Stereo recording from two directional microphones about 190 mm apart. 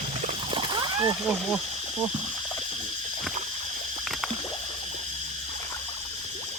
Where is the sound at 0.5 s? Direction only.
25° right (ahead or behind).